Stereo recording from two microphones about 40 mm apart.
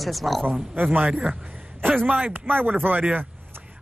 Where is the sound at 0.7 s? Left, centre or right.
Right.